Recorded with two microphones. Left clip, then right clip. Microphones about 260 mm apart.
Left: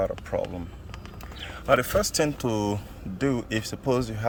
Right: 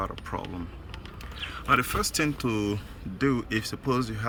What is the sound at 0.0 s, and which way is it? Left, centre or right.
Speech, centre.